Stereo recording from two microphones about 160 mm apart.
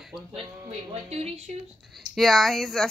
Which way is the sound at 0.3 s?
40° right (ahead or behind).